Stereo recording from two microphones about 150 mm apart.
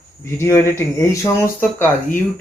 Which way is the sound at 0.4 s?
20° left (ahead or behind).